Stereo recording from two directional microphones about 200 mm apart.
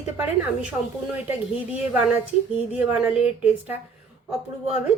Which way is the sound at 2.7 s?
5° right (ahead or behind).